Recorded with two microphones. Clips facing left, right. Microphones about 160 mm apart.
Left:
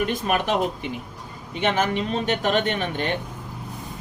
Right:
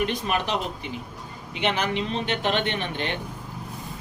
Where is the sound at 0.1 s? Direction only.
50° left (ahead or behind).